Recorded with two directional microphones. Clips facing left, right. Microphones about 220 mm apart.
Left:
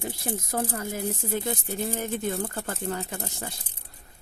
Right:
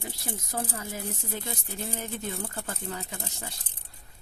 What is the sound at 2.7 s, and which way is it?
Speech, 50° left (ahead or behind).